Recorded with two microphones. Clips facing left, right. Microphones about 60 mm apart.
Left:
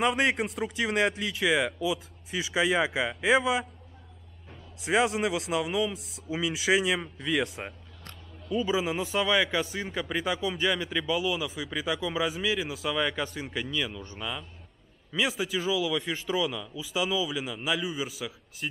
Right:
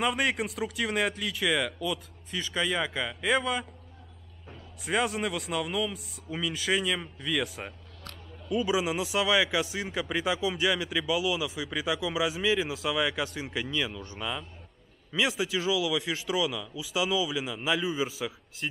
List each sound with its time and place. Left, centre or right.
0.0 s speech: centre
4.8 s speech: centre
8.5 s a man's voice: centre
17.8 s a man's voice: centre
18.6 s speech: centre